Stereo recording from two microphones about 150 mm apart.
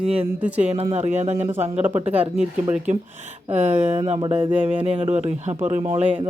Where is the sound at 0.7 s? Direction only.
40° right (ahead or behind).